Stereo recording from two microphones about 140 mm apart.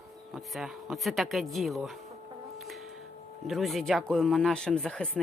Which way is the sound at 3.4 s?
Centre (ahead or behind).